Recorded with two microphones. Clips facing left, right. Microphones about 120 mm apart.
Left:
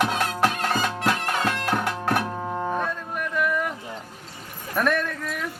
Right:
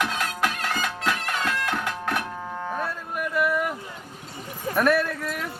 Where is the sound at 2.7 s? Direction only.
5° right (ahead or behind).